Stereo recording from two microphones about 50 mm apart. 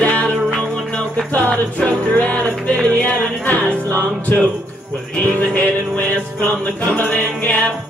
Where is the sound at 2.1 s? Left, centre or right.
Left.